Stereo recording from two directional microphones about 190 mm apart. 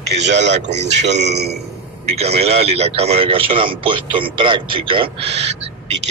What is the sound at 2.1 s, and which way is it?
A man's voice, 35° right (ahead or behind).